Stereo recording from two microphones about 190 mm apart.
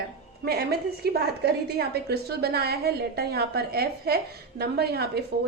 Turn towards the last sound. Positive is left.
turn(degrees=-55)  # may be behind; listen again after turning